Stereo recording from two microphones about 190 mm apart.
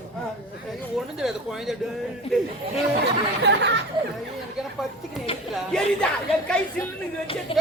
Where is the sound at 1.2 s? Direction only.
5° right (ahead or behind).